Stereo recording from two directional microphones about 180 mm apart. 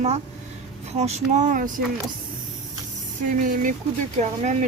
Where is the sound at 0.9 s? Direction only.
40° right (ahead or behind).